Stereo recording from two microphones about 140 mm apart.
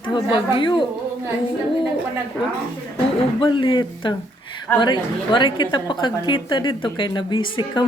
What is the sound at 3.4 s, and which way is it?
A woman's voice, 35° left (ahead or behind).